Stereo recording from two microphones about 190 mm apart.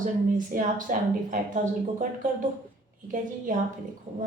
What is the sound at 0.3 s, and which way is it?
A woman's voice, 45° right (ahead or behind).